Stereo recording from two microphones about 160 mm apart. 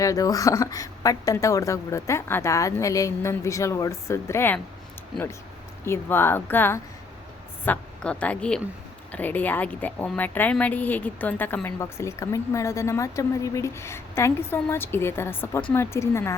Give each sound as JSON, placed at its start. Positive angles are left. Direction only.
{"t": 0.0, "sound": "a woman's voice", "side_deg": 20}
{"t": 5.8, "sound": "a woman's voice", "side_deg": 15}